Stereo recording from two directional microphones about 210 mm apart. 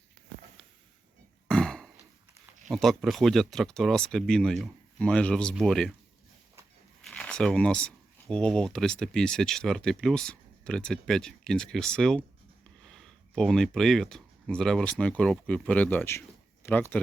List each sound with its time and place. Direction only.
1.5 s a sound: 5° left (ahead or behind)
2.6 s speech: centre (ahead or behind)
7.1 s speech: 5° left (ahead or behind)